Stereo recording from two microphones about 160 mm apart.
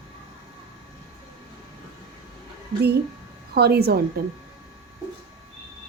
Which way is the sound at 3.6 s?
80° right.